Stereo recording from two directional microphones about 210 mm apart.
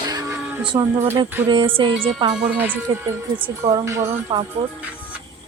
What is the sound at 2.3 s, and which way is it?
Speech, 10° right (ahead or behind).